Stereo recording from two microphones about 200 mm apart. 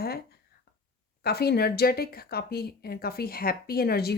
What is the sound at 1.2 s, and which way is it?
Speech, 50° left (ahead or behind).